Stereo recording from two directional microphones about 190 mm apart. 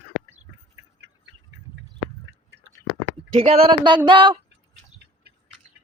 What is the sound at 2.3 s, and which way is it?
Chewing, 75° right (ahead or behind).